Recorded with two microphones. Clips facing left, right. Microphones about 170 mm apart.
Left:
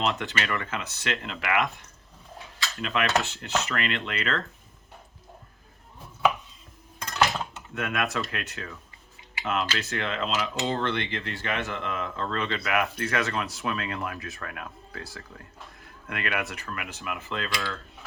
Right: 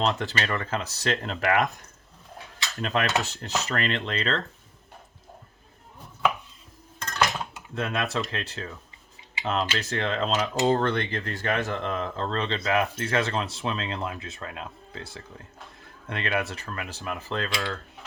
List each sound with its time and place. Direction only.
0.0 s speech: 35° right (ahead or behind)
2.8 s speech: 40° right (ahead or behind)
7.8 s speech: 30° right (ahead or behind)
16.0 s speech: 30° right (ahead or behind)